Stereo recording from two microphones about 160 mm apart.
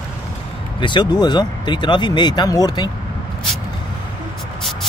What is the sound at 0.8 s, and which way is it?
Speech, 30° left (ahead or behind).